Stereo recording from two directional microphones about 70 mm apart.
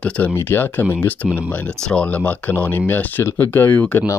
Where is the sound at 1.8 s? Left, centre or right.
Centre.